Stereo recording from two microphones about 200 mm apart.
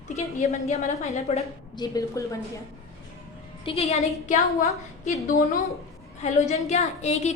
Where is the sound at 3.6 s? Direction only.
30° left (ahead or behind).